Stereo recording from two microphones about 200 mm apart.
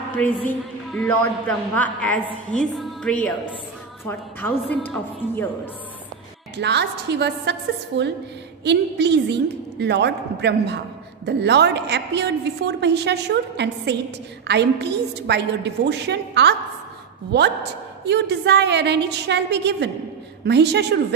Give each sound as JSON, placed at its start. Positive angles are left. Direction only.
{"t": 0.5, "sound": "a woman's voice", "side_deg": 5}
{"t": 6.5, "sound": "a woman's voice", "side_deg": -60}